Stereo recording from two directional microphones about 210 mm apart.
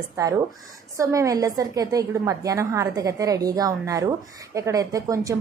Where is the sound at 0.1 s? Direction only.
15° right (ahead or behind).